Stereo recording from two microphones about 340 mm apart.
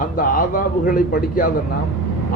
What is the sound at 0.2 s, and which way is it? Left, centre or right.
Speech, left.